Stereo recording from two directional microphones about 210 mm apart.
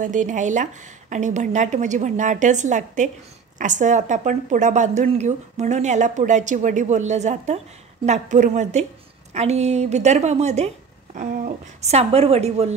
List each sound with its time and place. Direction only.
0.0 s a woman's voice: 35° right (ahead or behind)